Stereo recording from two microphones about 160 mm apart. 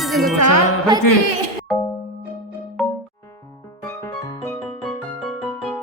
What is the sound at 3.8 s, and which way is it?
Music, 15° left (ahead or behind).